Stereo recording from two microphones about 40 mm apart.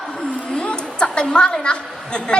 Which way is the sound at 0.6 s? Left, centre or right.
Left.